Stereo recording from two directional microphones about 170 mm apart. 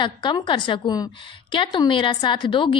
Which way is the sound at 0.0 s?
25° left (ahead or behind).